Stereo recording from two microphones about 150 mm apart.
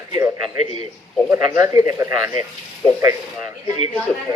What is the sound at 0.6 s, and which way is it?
Speech, 45° left (ahead or behind).